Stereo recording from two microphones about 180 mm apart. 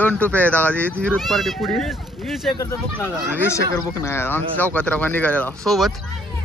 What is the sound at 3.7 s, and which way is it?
Speech, 15° left (ahead or behind).